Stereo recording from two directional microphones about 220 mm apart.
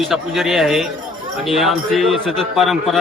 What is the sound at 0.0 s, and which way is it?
Speech, centre (ahead or behind).